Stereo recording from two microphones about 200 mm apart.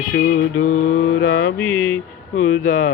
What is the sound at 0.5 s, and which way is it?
Mantra, 90° left.